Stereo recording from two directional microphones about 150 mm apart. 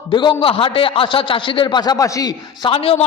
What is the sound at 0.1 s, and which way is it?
A man's voice, 30° left (ahead or behind).